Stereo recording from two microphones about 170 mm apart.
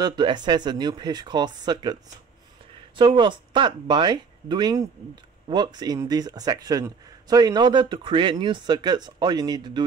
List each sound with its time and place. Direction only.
0.0 s speech: 25° right (ahead or behind)
3.0 s speech: 25° right (ahead or behind)